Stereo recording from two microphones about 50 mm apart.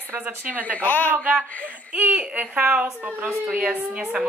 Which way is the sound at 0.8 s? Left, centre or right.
Left.